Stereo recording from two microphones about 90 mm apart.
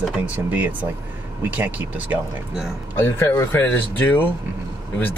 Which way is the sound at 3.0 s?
30° left (ahead or behind).